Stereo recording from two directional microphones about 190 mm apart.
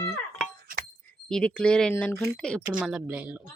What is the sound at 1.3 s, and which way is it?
Speech, 5° left (ahead or behind).